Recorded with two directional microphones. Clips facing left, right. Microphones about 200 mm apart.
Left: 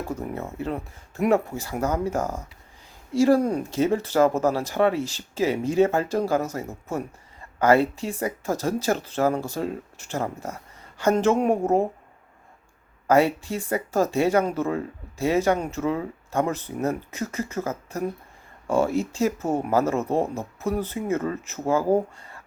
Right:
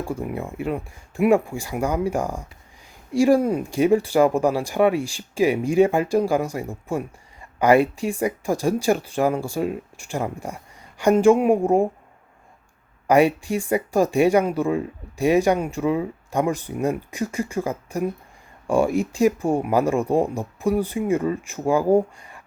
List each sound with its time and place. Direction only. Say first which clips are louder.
0.0 s speech: right 3 dB; 10° right (ahead or behind)
13.1 s speech: right 3 dB; 15° right (ahead or behind)